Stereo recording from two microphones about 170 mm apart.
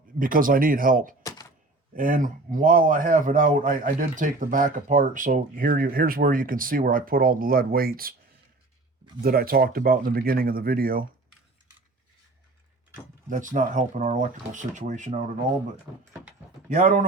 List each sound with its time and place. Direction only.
0.2 s a man's voice: 55° right (ahead or behind)
1.2 s thunk: 20° left (ahead or behind)
2.0 s a man's voice: 50° right (ahead or behind)
9.2 s a man's voice: 60° right (ahead or behind)
13.3 s speech: 50° right (ahead or behind)
15.9 s speech: 15° right (ahead or behind)
16.6 s speech: 50° right (ahead or behind)